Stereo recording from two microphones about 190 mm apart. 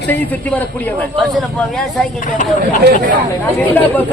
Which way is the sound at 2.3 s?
40° left (ahead or behind).